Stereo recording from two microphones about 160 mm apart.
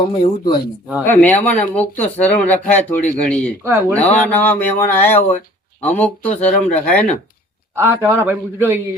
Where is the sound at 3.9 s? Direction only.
10° left (ahead or behind).